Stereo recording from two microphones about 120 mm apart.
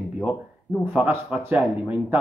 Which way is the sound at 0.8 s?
15° right (ahead or behind).